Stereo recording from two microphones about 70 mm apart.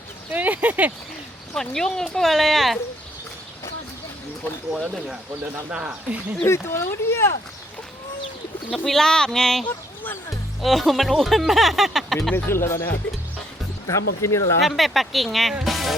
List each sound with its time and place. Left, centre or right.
0.3 s speech: right
1.5 s speech: centre
5.7 s speech: right
6.4 s speech: left
8.7 s speech: centre
12.3 s speech: left
14.6 s speech: centre
15.6 s music: centre